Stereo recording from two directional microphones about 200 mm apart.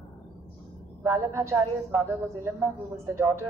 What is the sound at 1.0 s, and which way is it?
A woman's voice, 15° right (ahead or behind).